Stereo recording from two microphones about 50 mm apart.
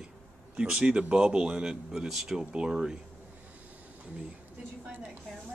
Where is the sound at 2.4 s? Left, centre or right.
Right.